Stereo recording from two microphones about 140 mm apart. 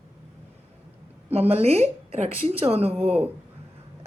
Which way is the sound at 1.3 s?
45° right (ahead or behind).